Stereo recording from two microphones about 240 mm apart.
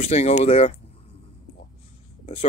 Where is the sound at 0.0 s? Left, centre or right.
Left.